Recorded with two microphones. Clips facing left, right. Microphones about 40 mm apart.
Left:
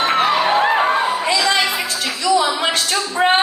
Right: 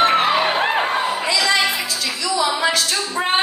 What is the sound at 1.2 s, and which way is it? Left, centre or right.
Music, left.